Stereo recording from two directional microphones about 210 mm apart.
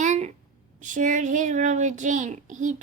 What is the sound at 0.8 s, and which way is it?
A woman's voice, 35° right (ahead or behind).